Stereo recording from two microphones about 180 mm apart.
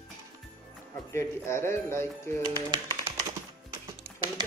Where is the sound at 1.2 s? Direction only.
15° left (ahead or behind).